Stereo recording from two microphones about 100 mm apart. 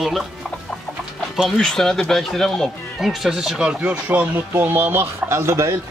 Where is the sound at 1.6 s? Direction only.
5° left (ahead or behind).